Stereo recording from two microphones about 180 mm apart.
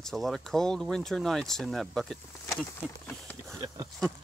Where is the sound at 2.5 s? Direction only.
10° left (ahead or behind).